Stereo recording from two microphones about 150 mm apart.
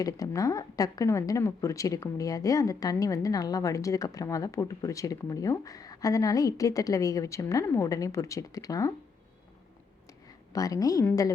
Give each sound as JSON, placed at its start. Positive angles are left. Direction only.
{"t": 0.0, "sound": "a woman's voice", "side_deg": 25}
{"t": 10.5, "sound": "a woman's voice", "side_deg": 25}